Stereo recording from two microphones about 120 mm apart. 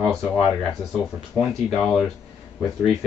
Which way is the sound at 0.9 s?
5° right (ahead or behind).